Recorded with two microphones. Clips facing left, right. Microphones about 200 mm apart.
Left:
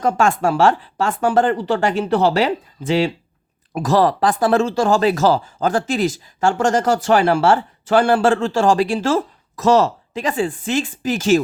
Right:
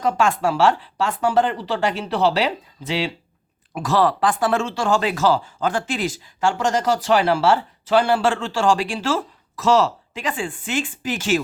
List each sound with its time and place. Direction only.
0.0 s speech: 45° left (ahead or behind)